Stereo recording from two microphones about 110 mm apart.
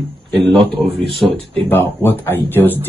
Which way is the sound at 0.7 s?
55° right (ahead or behind).